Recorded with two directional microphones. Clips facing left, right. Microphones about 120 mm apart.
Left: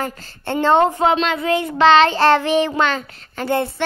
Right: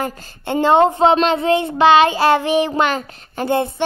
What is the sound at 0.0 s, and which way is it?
Speech, 15° right (ahead or behind).